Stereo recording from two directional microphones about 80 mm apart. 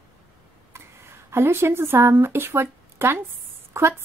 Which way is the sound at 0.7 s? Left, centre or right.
Right.